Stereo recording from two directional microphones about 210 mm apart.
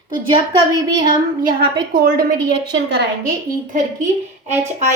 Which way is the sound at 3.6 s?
35° right (ahead or behind).